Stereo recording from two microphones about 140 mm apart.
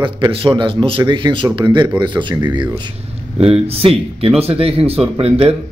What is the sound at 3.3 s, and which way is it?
Speech, 45° right (ahead or behind).